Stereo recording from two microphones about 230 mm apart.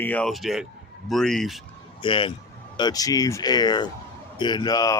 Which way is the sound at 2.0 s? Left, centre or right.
Left.